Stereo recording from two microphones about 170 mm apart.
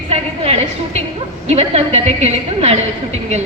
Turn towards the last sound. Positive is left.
turn(degrees=-40)  # may be behind; listen again after turning